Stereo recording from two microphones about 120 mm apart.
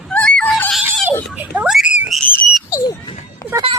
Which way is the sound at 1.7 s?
5° right (ahead or behind).